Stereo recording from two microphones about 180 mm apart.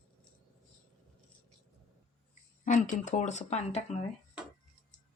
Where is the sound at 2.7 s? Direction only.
40° left (ahead or behind).